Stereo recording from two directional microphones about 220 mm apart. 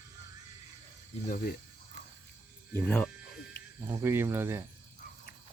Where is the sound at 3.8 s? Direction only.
10° right (ahead or behind).